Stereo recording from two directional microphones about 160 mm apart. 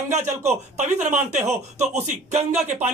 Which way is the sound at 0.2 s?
15° right (ahead or behind).